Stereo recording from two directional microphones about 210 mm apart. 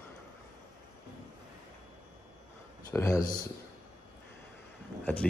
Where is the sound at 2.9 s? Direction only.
15° left (ahead or behind).